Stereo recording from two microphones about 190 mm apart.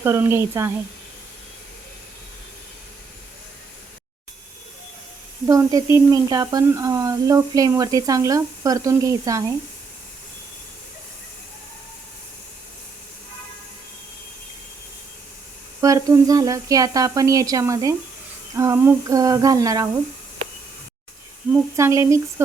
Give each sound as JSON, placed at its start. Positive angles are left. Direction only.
{"t": 0.0, "sound": "speech", "side_deg": -15}
{"t": 5.5, "sound": "speech", "side_deg": -15}
{"t": 15.8, "sound": "speech", "side_deg": -20}
{"t": 21.5, "sound": "speech", "side_deg": -15}